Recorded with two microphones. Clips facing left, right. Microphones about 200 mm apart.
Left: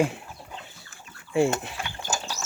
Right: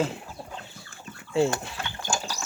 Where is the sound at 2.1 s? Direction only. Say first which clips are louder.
Right 1 dB; 20° left (ahead or behind).